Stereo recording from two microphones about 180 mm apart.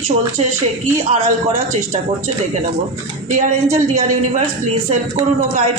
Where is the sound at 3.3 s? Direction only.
45° right (ahead or behind).